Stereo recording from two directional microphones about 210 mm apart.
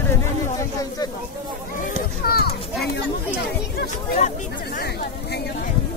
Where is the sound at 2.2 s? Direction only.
45° left (ahead or behind).